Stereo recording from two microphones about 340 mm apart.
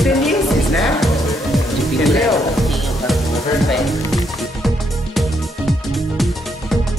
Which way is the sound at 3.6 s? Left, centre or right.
Centre.